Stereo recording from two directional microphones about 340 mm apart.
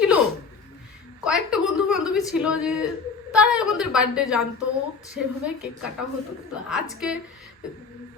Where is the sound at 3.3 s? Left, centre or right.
Centre.